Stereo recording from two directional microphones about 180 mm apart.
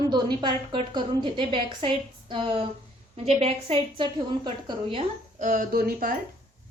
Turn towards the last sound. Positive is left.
turn(degrees=-55)  # may be behind; listen again after turning